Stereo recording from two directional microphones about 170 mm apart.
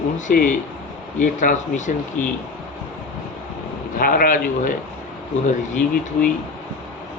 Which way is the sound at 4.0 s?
55° left (ahead or behind).